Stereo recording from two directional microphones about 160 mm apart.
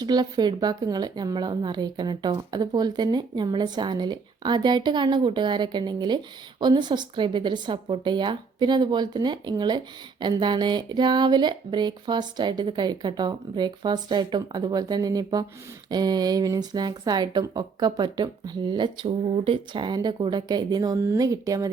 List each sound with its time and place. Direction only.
0.0 s a woman's voice: 25° right (ahead or behind)